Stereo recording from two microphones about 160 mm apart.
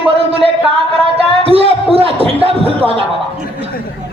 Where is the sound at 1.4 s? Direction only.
35° right (ahead or behind).